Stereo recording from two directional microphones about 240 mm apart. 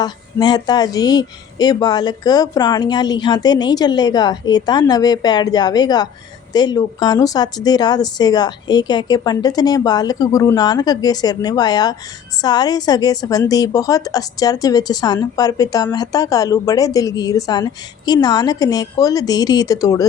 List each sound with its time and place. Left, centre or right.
0.0 s a woman's voice: centre